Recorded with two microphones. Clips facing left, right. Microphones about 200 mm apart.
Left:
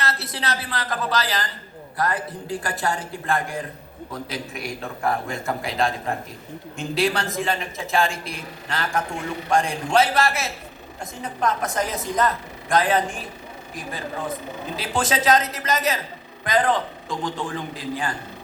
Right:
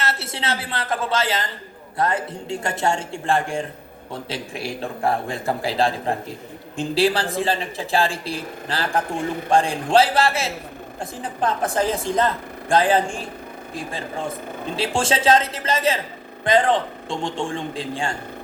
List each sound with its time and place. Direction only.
0.0 s a woman's voice: 25° right (ahead or behind)